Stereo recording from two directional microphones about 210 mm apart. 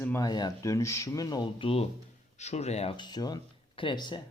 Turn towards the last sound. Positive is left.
turn(degrees=20)  # may be behind; listen again after turning